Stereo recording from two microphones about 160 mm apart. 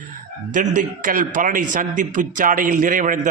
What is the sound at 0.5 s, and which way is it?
A man's voice, 55° right (ahead or behind).